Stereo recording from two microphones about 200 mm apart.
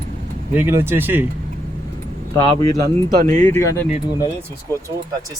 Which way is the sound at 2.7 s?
45° right (ahead or behind).